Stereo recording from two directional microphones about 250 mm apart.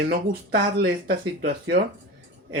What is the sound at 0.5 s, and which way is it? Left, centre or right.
Speech, right.